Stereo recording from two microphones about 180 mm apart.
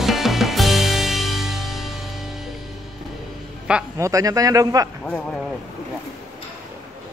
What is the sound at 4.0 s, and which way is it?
Speech, 20° right (ahead or behind).